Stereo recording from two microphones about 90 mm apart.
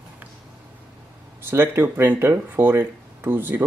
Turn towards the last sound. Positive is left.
turn(degrees=-25)  # may be behind; listen again after turning